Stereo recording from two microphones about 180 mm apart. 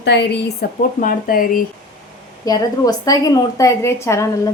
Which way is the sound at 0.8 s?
50° left (ahead or behind).